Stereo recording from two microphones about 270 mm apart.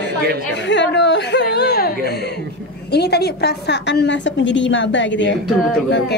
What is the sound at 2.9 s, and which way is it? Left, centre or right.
A woman's voice, left.